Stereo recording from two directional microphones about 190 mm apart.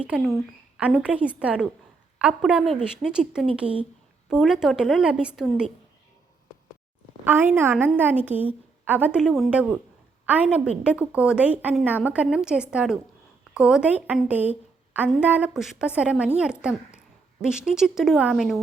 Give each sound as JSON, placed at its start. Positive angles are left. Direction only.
{"t": 0.0, "sound": "a woman's voice", "side_deg": -5}
{"t": 7.3, "sound": "a woman's voice", "side_deg": -10}